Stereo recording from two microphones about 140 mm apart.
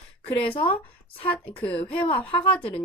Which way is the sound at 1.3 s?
10° left (ahead or behind).